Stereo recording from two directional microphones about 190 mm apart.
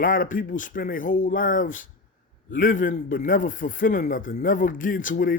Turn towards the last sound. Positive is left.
turn(degrees=45)  # may be behind; listen again after turning